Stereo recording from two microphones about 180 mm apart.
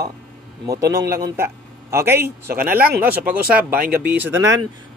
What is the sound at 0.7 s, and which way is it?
Speech, 15° right (ahead or behind).